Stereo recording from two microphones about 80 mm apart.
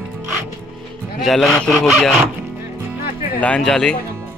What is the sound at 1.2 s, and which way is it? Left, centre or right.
Speech, centre.